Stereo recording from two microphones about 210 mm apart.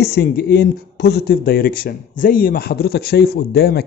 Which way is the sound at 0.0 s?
50° left (ahead or behind).